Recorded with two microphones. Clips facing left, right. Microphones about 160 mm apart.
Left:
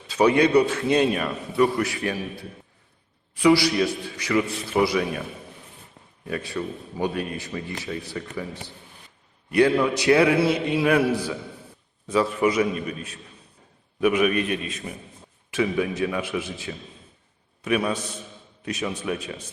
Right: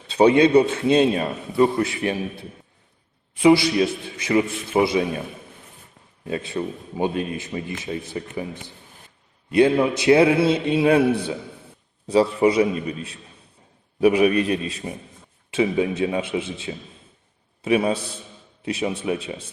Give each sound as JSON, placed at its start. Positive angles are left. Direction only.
{"t": 0.1, "sound": "a man's voice", "side_deg": -25}
{"t": 3.3, "sound": "a man's voice", "side_deg": -25}
{"t": 6.2, "sound": "a man's voice", "side_deg": -25}